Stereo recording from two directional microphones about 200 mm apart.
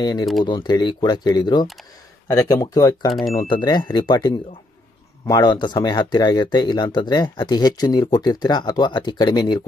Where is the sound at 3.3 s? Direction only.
20° left (ahead or behind).